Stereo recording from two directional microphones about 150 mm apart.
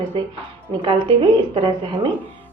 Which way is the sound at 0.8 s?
35° right (ahead or behind).